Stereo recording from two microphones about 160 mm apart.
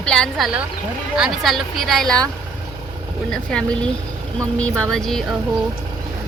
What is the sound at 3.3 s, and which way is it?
Speech, 5° left (ahead or behind).